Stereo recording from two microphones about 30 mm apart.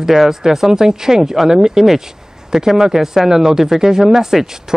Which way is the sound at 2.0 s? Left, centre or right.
Centre.